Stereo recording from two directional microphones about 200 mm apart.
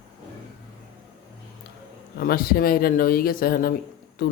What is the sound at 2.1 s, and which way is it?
Speech, 50° left (ahead or behind).